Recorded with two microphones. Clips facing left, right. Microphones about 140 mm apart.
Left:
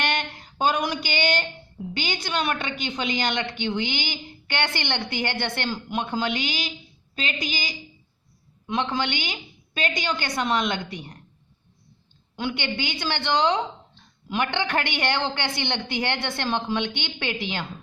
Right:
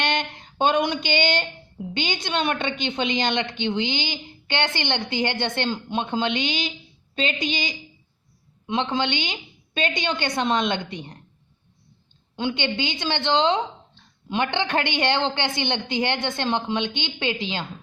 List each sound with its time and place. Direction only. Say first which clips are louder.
0.0 s a sound: right 2 dB; 20° right (ahead or behind)
1.9 s a woman's voice: right 2 dB; 25° right (ahead or behind)
12.4 s a woman's voice: right 3 dB; 20° right (ahead or behind)